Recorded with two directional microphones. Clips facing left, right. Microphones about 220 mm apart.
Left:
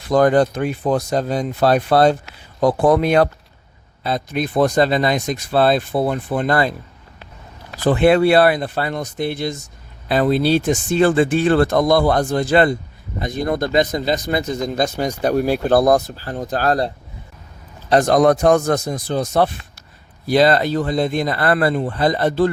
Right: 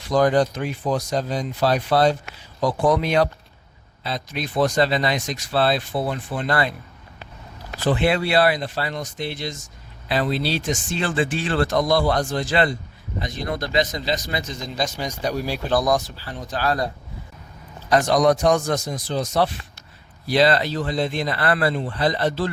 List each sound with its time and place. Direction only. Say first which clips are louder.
0.0 s a man's voice: left 4 dB; 55° left (ahead or behind)
7.9 s a man's voice: left 7 dB; 50° left (ahead or behind)
18.0 s speech: left 4 dB; 50° left (ahead or behind)
20.2 s a man's voice: left 4 dB; 45° left (ahead or behind)